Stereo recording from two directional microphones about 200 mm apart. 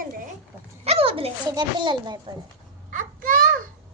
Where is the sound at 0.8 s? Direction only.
30° right (ahead or behind).